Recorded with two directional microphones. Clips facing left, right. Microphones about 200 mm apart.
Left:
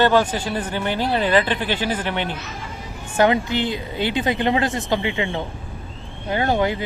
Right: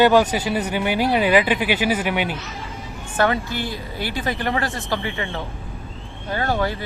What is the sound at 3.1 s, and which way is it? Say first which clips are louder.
Speech: left 3 dB; 20° left (ahead or behind).